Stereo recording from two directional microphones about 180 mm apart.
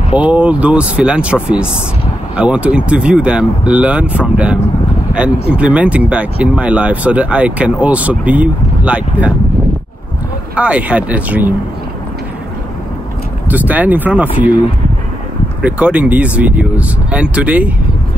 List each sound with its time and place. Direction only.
0.1 s speech: 5° right (ahead or behind)
10.5 s speech: 5° right (ahead or behind)
13.5 s speech: 10° right (ahead or behind)
15.6 s speech: 5° right (ahead or behind)